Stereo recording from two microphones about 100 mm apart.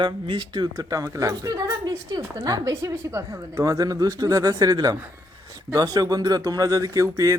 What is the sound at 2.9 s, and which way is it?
Speech, 25° right (ahead or behind).